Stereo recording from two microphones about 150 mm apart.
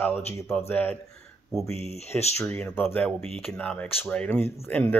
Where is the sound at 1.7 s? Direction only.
45° left (ahead or behind).